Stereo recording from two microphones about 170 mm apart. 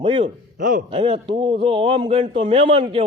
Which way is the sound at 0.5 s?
50° right (ahead or behind).